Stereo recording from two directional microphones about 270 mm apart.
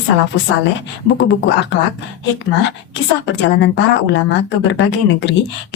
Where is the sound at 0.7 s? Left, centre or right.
Left.